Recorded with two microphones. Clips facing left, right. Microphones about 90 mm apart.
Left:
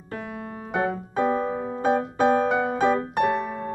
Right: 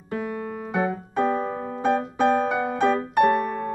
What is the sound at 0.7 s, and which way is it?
Music, centre (ahead or behind).